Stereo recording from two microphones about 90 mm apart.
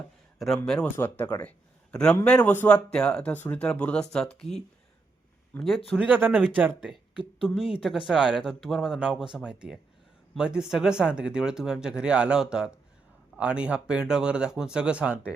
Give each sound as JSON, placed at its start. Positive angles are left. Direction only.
{"t": 0.3, "sound": "a man's voice", "side_deg": 0}
{"t": 0.9, "sound": "a man's voice", "side_deg": 20}
{"t": 5.6, "sound": "a man's voice", "side_deg": 0}
{"t": 6.0, "sound": "speech", "side_deg": -20}
{"t": 7.4, "sound": "a man's voice", "side_deg": -5}